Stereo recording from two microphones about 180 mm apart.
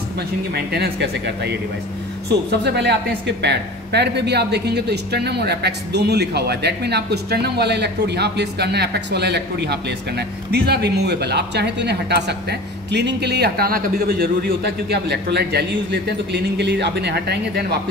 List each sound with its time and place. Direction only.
0.6 s speech: 60° right (ahead or behind)
2.5 s speech: 70° right (ahead or behind)